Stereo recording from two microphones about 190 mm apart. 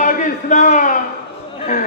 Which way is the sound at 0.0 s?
45° left (ahead or behind).